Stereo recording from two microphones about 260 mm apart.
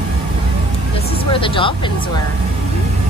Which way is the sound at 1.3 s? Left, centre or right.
Centre.